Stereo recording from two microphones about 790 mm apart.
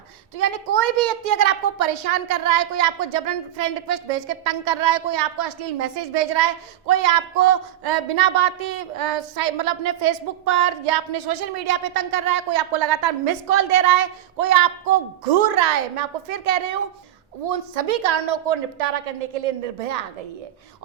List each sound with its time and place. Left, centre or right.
0.3 s a woman's voice: right